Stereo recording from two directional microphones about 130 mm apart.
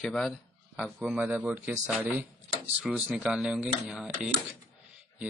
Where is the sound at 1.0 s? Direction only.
5° right (ahead or behind).